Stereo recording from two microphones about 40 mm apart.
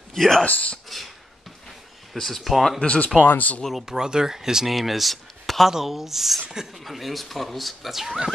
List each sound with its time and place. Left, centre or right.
0.1 s speech: centre
0.5 s speech: left
0.8 s speech: centre
2.1 s speech: centre
2.8 s speech: left
3.3 s speech: left
3.7 s speech: centre
6.8 s speech: centre